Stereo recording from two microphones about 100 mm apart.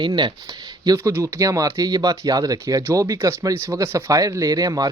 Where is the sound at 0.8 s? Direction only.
35° right (ahead or behind).